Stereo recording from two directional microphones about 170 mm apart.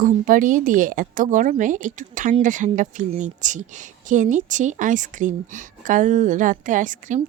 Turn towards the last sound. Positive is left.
turn(degrees=-50)  # may be behind; listen again after turning